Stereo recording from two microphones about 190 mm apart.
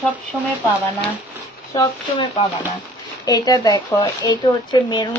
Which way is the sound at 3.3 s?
20° left (ahead or behind).